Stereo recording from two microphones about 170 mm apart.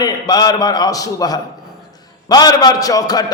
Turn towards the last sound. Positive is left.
turn(degrees=20)  # may be behind; listen again after turning